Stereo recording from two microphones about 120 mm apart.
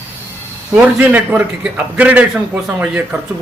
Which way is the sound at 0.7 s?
10° right (ahead or behind).